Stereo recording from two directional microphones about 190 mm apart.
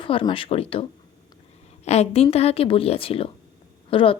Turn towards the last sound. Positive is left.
turn(degrees=30)  # may be behind; listen again after turning